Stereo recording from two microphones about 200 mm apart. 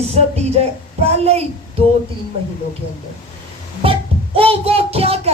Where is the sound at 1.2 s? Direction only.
30° right (ahead or behind).